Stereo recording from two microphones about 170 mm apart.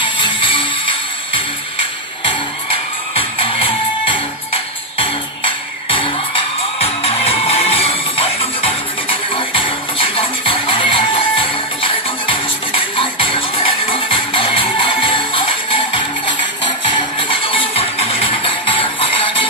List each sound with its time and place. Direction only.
0.0 s music: 30° left (ahead or behind)
3.2 s music: 30° left (ahead or behind)